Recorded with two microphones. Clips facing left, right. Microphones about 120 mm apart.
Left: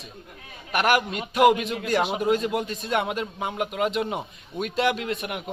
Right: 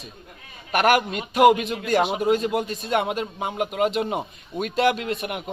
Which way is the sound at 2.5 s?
40° right (ahead or behind).